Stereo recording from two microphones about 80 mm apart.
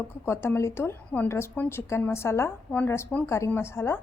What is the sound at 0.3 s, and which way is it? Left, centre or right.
A woman's voice, left.